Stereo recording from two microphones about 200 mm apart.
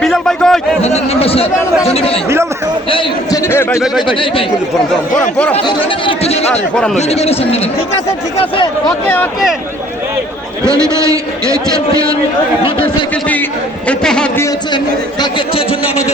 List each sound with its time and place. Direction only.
0.0 s a sound: 5° left (ahead or behind)
0.8 s a sound: 30° left (ahead or behind)
1.8 s a man's voice: 30° left (ahead or behind)
3.5 s a sound: 10° left (ahead or behind)
5.5 s speech: 25° left (ahead or behind)
6.5 s a man's voice: 5° left (ahead or behind)
6.9 s a man's voice: 30° left (ahead or behind)
9.0 s a man's voice: 5° left (ahead or behind)
10.7 s a man's voice: 15° right (ahead or behind)
12.6 s speech: 25° left (ahead or behind)
13.8 s a man's voice: 5° left (ahead or behind)